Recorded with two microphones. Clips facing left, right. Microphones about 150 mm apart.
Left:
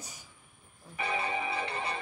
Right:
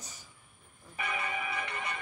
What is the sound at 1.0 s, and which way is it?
Music, 30° left (ahead or behind).